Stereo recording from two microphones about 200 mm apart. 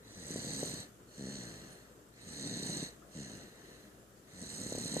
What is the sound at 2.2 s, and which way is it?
Snoring, 90° right.